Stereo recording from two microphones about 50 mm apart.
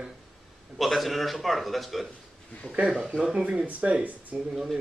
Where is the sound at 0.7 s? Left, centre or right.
Centre.